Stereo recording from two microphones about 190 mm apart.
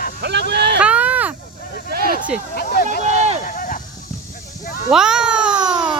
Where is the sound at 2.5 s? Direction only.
50° left (ahead or behind).